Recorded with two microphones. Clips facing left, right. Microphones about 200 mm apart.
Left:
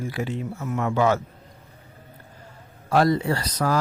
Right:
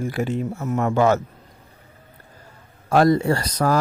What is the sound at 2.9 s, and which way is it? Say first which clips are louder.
Speech: right 4 dB; 50° right (ahead or behind).